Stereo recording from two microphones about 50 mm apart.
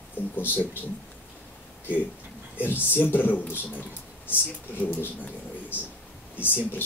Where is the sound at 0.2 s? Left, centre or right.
Left.